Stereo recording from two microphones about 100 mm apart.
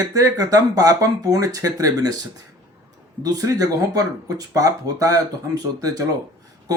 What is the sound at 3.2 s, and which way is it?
Speech, 35° right (ahead or behind).